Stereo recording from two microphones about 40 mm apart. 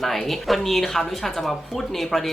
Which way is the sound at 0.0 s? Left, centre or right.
Centre.